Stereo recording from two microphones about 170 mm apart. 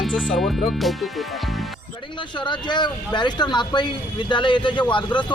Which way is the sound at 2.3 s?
25° left (ahead or behind).